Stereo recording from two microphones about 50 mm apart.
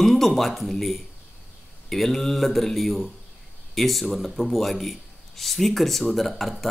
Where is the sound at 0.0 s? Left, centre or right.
Centre.